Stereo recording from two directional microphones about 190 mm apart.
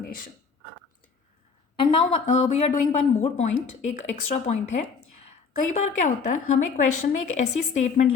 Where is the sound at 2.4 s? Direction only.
35° left (ahead or behind).